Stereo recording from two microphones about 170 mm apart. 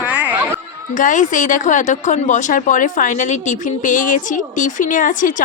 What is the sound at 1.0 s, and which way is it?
A woman's voice, 50° left (ahead or behind).